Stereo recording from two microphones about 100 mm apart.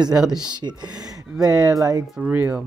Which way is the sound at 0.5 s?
45° right (ahead or behind).